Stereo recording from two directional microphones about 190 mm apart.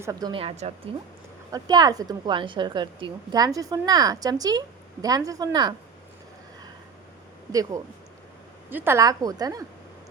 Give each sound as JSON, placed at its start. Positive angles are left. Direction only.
{"t": 0.0, "sound": "a woman's voice", "side_deg": -20}
{"t": 1.5, "sound": "a woman's voice", "side_deg": -20}
{"t": 7.5, "sound": "a woman's voice", "side_deg": -15}